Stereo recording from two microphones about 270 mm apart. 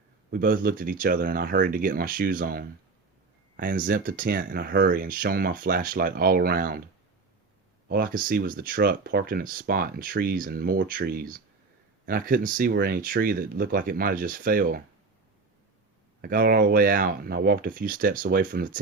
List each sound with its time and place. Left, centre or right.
0.3 s speech: right
7.9 s speech: right
16.2 s speech: right